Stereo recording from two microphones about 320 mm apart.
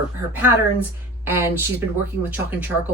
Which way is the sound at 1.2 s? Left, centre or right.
Centre.